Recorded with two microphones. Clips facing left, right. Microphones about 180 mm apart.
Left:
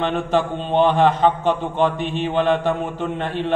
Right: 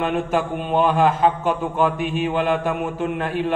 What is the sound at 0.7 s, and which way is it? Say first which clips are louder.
Speech: left 2 dB; 25° left (ahead or behind).